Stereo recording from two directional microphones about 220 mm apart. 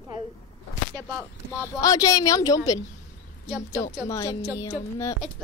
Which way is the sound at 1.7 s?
15° left (ahead or behind).